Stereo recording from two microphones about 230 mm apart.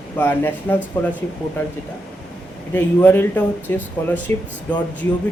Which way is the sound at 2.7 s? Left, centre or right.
Centre.